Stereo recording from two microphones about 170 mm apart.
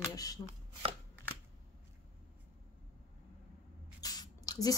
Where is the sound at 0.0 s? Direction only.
20° left (ahead or behind).